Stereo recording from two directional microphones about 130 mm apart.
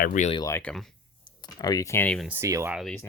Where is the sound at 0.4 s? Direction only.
20° left (ahead or behind).